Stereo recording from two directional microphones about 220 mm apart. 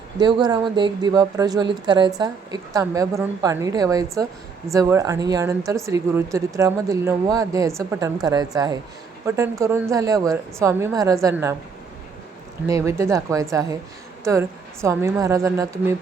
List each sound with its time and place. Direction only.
0.2 s a woman's voice: 20° right (ahead or behind)
12.6 s a woman's voice: 15° right (ahead or behind)